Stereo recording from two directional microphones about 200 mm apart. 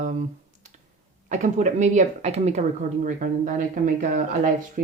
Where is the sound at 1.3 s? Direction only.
35° right (ahead or behind).